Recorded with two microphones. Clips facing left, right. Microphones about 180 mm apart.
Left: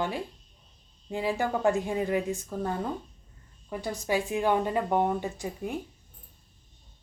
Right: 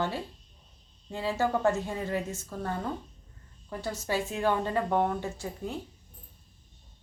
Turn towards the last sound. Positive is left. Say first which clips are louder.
# left 2 dB
turn(degrees=15)  # may be behind; listen again after turning